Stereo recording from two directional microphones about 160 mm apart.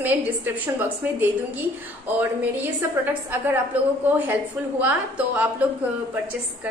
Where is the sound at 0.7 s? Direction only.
10° right (ahead or behind).